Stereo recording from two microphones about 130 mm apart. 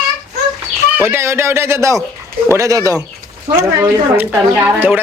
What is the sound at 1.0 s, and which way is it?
Speech, 20° right (ahead or behind).